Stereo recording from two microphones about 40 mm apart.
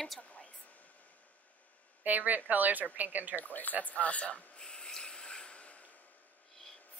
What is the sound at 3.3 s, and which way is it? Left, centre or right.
Speech, left.